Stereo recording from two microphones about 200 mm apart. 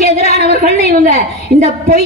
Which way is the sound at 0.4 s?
50° right (ahead or behind).